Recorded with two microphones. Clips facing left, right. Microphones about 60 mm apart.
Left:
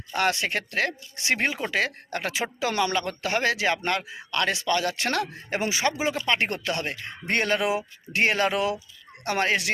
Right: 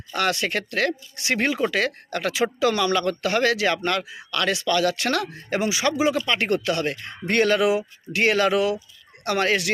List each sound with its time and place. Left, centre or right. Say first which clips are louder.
0.1 s speech: right 1 dB; left